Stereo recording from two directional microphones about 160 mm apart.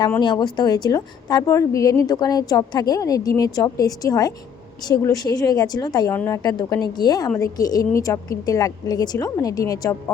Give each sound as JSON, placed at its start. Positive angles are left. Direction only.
{"t": 0.2, "sound": "a woman's voice", "side_deg": 30}